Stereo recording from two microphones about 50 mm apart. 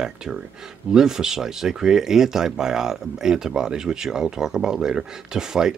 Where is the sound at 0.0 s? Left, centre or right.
Centre.